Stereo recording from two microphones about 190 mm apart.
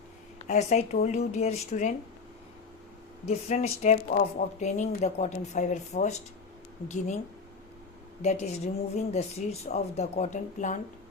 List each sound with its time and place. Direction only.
0.4 s speech: 35° left (ahead or behind)
3.2 s speech: 35° left (ahead or behind)
8.2 s speech: 35° left (ahead or behind)